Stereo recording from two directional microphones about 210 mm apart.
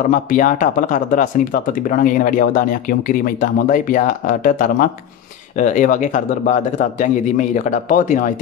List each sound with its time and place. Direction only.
0.1 s speech: 40° left (ahead or behind)